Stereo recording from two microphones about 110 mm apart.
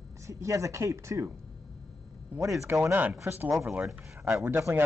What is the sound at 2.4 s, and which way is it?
Speech, 30° right (ahead or behind).